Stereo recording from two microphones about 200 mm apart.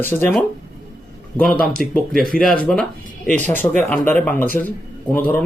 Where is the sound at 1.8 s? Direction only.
Centre (ahead or behind).